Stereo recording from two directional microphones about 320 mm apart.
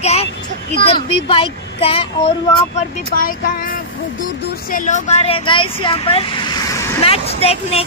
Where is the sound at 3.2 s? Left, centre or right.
Left.